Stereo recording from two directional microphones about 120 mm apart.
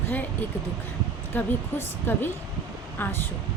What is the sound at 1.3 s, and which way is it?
A woman's voice, 15° left (ahead or behind).